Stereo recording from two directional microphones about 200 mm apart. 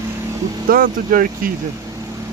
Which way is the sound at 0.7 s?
45° right (ahead or behind).